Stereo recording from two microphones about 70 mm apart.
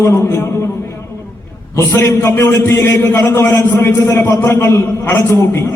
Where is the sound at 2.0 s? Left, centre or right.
Left.